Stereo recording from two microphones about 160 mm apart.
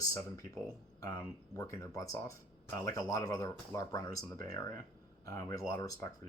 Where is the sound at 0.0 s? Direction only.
20° left (ahead or behind).